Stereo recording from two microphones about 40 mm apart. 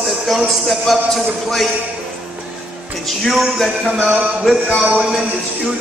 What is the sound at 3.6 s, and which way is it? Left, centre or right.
Music, centre.